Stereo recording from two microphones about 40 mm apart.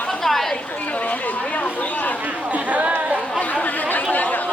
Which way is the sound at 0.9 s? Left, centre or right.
Left.